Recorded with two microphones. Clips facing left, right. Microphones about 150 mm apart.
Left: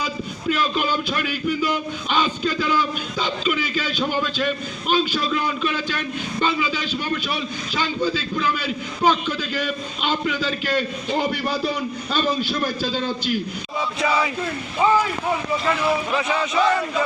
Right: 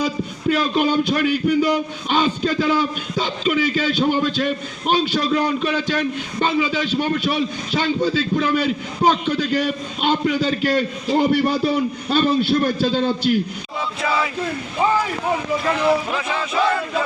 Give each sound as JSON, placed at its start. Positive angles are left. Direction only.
{"t": 0.5, "sound": "a man's voice", "side_deg": -50}
{"t": 16.1, "sound": "speech", "side_deg": 0}